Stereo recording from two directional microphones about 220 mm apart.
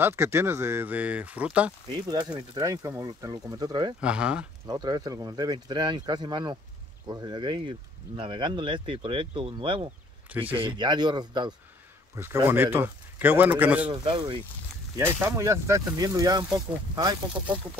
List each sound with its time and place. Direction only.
0.0 s speech: 10° right (ahead or behind)
4.0 s speech: 5° right (ahead or behind)
4.6 s speech: 20° right (ahead or behind)
14.0 s speech: 25° right (ahead or behind)
15.0 s speech: 10° right (ahead or behind)